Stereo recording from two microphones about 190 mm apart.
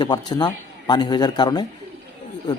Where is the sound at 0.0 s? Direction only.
25° left (ahead or behind).